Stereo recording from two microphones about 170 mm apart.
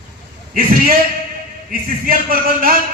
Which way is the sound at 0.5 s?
55° right (ahead or behind).